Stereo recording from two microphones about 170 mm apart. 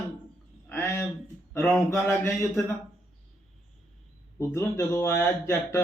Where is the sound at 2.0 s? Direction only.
15° left (ahead or behind).